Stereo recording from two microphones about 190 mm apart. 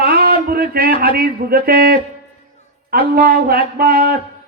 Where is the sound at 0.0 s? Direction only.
50° right (ahead or behind).